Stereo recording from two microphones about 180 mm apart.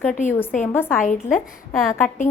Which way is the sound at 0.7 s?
10° left (ahead or behind).